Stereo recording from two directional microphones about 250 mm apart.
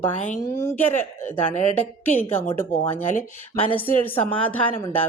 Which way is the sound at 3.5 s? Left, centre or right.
Left.